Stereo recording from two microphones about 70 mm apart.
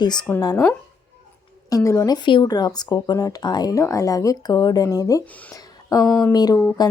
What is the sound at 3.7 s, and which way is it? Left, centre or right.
Speech, left.